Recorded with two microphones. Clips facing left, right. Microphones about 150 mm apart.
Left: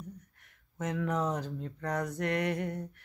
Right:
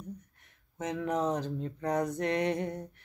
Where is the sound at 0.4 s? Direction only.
20° right (ahead or behind).